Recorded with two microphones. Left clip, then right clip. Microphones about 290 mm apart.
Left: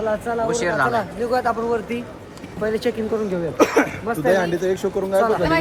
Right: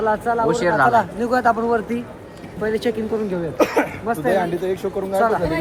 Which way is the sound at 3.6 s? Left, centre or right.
Left.